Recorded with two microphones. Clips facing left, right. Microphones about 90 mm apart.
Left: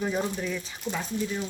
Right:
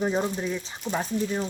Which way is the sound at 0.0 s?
25° right (ahead or behind).